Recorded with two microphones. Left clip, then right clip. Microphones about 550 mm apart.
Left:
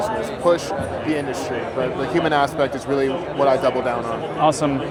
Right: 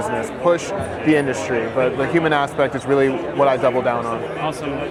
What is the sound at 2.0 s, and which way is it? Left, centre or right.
A man's voice, right.